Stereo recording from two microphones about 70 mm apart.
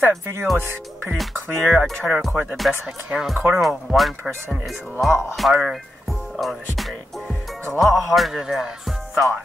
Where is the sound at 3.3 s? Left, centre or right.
Right.